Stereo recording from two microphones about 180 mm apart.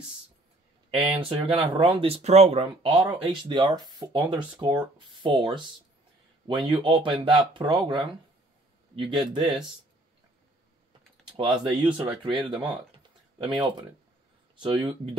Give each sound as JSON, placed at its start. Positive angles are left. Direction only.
{"t": 1.1, "sound": "speech", "side_deg": -30}
{"t": 11.3, "sound": "speech", "side_deg": -25}
{"t": 12.9, "sound": "typing", "side_deg": -25}
{"t": 14.6, "sound": "speech", "side_deg": -30}